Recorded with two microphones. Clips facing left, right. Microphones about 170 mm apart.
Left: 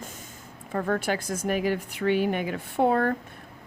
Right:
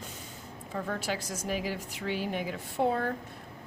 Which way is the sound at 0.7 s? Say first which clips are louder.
Left 7 dB; 55° left (ahead or behind).